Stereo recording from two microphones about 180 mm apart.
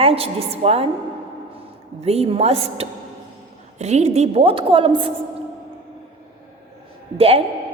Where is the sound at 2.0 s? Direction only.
35° right (ahead or behind).